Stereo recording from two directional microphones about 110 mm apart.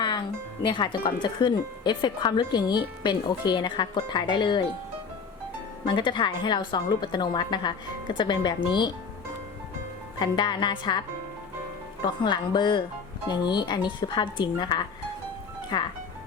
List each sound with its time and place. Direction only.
0.6 s speech: 45° left (ahead or behind)
5.8 s speech: 45° left (ahead or behind)
10.2 s speech: 45° left (ahead or behind)
12.0 s speech: 40° left (ahead or behind)